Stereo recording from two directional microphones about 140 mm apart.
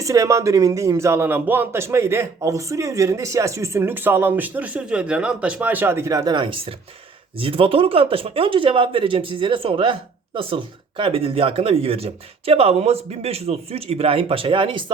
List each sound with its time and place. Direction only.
0.0 s speech: 20° right (ahead or behind)